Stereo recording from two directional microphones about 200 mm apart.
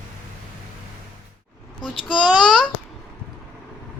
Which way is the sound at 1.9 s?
25° left (ahead or behind).